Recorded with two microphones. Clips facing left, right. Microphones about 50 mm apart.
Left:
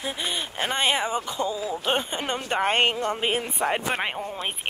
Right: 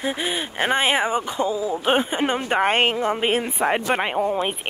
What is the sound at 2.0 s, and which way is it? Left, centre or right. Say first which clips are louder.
Speech: right 6 dB; centre.